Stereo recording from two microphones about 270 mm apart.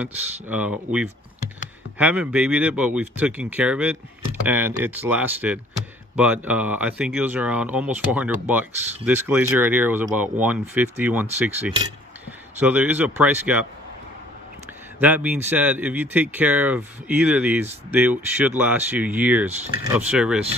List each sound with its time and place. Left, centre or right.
0.0 s speech: centre
15.0 s speech: centre